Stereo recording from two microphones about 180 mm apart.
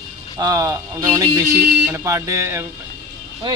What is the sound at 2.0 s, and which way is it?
Speech, 15° right (ahead or behind).